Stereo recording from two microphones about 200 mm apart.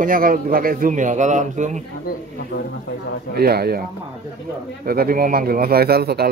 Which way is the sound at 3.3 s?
50° right (ahead or behind).